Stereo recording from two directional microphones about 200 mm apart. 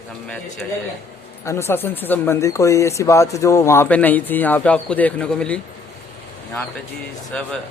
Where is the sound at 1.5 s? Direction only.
15° left (ahead or behind).